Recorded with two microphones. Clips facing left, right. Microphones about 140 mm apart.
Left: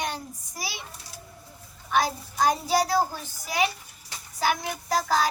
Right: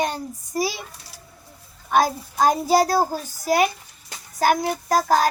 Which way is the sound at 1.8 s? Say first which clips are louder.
Right 5 dB; 50° right (ahead or behind).